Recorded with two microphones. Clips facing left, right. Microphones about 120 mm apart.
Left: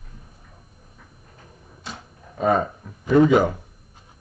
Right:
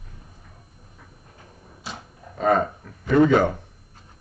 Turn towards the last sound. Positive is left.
turn(degrees=10)  # may be behind; listen again after turning